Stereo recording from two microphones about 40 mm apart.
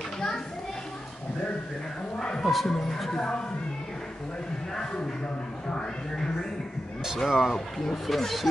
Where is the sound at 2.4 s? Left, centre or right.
Centre.